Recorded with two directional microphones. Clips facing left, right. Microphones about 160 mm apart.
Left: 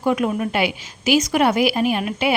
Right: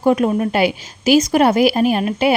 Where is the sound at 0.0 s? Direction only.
35° right (ahead or behind).